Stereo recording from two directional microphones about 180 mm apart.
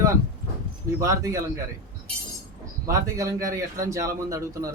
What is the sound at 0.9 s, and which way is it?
Speech, 20° right (ahead or behind).